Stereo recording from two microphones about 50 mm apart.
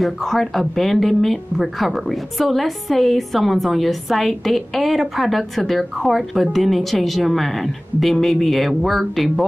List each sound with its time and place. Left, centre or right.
0.0 s speech: centre